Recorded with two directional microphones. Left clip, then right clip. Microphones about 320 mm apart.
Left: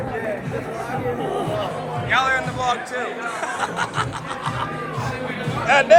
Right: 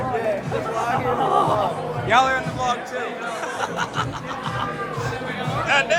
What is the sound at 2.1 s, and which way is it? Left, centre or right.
A man's voice, centre.